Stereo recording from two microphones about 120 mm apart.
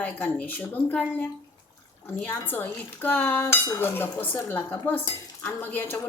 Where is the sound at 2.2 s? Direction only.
15° left (ahead or behind).